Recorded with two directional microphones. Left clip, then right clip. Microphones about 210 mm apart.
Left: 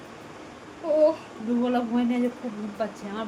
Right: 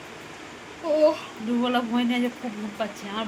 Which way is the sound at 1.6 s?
Centre (ahead or behind).